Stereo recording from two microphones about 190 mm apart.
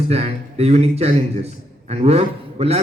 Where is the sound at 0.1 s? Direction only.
35° right (ahead or behind).